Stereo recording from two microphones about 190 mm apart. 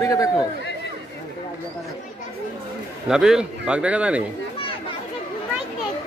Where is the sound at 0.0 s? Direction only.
15° left (ahead or behind).